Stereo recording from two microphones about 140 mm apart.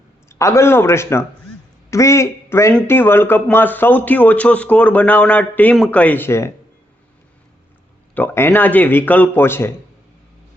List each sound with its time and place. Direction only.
0.3 s a man's voice: 20° left (ahead or behind)
8.1 s speech: 15° left (ahead or behind)